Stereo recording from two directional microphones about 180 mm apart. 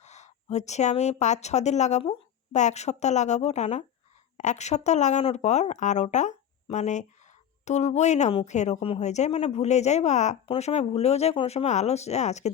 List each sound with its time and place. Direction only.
0.0 s a woman's voice: 40° left (ahead or behind)